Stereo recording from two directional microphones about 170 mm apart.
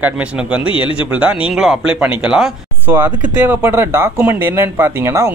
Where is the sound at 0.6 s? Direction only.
30° left (ahead or behind).